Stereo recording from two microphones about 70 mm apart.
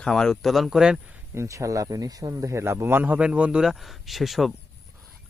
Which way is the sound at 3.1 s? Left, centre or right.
Centre.